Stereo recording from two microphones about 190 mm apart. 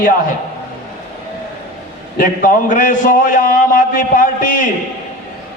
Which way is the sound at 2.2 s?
45° left (ahead or behind).